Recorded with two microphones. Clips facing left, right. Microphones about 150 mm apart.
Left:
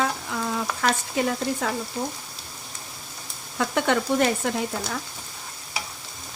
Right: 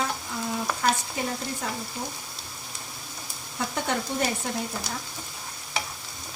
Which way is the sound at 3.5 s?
90° left.